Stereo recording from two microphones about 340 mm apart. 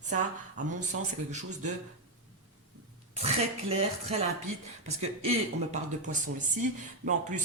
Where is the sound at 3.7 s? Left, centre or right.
Centre.